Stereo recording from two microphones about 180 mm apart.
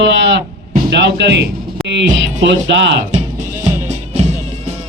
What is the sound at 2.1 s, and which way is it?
Speech, 90° right.